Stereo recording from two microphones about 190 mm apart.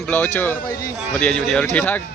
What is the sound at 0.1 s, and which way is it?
A man's voice, 10° left (ahead or behind).